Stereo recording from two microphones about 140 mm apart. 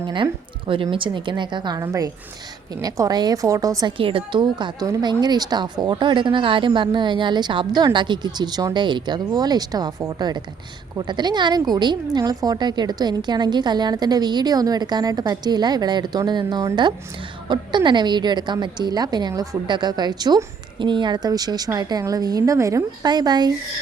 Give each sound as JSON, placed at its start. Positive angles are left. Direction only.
{"t": 0.7, "sound": "a woman's voice", "side_deg": -40}
{"t": 1.8, "sound": "a woman's voice", "side_deg": -20}
{"t": 3.9, "sound": "a woman's voice", "side_deg": -40}